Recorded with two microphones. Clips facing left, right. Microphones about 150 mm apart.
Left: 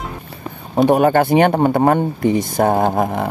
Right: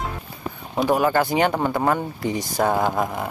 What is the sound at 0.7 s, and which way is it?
Speech, 60° left (ahead or behind).